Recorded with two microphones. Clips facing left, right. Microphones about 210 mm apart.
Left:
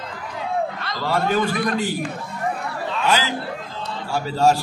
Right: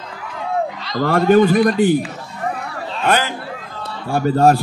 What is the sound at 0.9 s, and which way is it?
A man's voice, 55° right (ahead or behind).